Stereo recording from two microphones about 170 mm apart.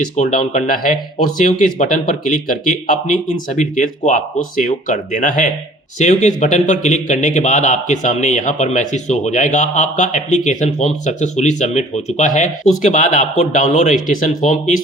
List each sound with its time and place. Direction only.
0.2 s speech: 50° left (ahead or behind)